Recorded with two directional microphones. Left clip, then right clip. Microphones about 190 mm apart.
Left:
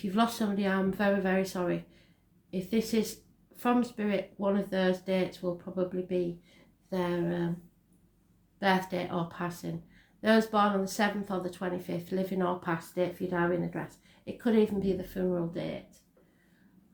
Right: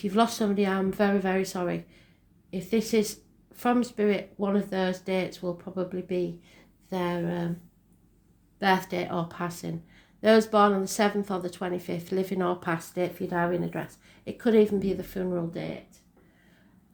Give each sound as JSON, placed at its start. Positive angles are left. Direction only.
{"t": 0.0, "sound": "speech", "side_deg": -40}
{"t": 8.5, "sound": "speech", "side_deg": -40}